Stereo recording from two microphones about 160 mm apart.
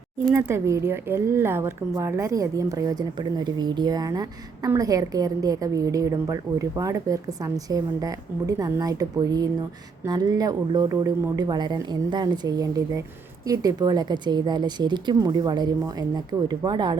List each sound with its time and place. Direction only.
0.3 s a woman's voice: 15° right (ahead or behind)